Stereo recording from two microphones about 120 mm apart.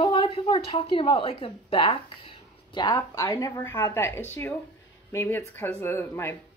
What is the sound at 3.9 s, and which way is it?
Speech, 20° left (ahead or behind).